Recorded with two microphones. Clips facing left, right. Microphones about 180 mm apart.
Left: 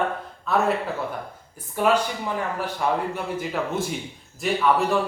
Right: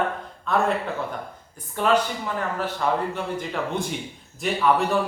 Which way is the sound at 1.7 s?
10° left (ahead or behind).